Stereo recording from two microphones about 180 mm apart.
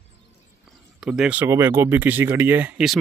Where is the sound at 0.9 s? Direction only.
5° right (ahead or behind).